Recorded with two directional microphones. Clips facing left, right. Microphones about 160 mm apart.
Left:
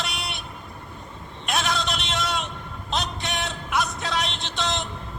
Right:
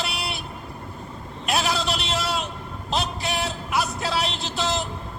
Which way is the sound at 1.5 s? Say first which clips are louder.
Right 2 dB; centre (ahead or behind).